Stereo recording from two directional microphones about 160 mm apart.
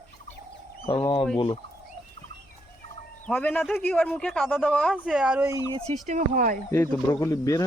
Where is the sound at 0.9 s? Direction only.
35° left (ahead or behind).